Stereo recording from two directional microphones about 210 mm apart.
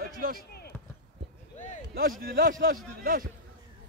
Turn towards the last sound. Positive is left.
turn(degrees=-45)  # may be behind; listen again after turning